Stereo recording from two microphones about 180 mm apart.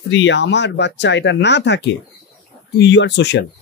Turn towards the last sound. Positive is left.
turn(degrees=75)  # may be behind; listen again after turning